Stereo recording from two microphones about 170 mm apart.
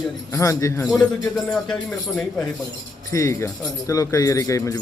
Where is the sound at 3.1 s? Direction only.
15° left (ahead or behind).